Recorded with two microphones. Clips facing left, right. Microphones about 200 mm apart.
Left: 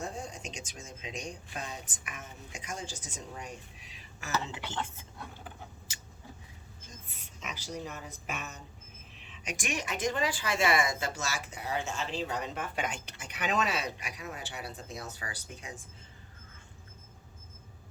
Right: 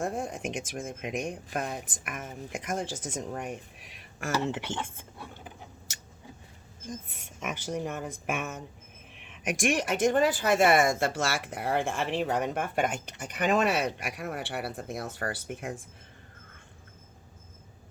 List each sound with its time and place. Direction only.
0.0 s speech: 55° right (ahead or behind)
4.8 s speech: 10° right (ahead or behind)
7.2 s speech: 50° right (ahead or behind)